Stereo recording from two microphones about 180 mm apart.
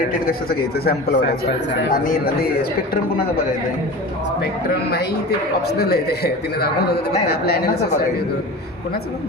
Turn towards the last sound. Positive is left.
turn(degrees=60)  # may be behind; listen again after turning